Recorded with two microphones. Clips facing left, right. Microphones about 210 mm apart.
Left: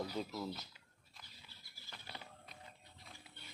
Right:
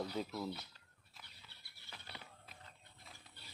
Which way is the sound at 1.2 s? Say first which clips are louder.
Left 1 dB; 65° right (ahead or behind).